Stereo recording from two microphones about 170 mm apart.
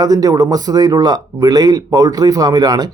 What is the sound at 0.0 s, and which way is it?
Speech, 20° right (ahead or behind).